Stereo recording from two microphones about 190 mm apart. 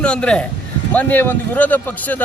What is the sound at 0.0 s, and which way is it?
A man's voice, 5° left (ahead or behind).